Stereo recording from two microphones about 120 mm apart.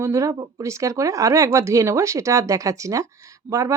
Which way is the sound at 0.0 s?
25° right (ahead or behind).